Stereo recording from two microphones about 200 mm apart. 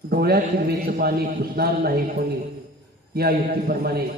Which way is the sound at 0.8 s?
50° right (ahead or behind).